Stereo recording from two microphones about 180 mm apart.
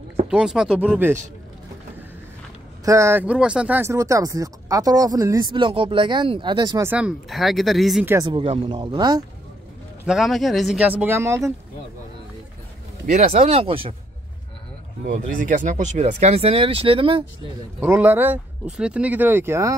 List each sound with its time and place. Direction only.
0.3 s speech: 5° right (ahead or behind)
2.8 s speech: 15° right (ahead or behind)
6.9 s speech: 5° right (ahead or behind)
8.3 s speech: 30° right (ahead or behind)
10.0 s speech: centre (ahead or behind)
13.0 s speech: 40° right (ahead or behind)
15.0 s speech: 45° right (ahead or behind); by 17.2 s 30° right (ahead or behind)
17.7 s speech: 10° right (ahead or behind)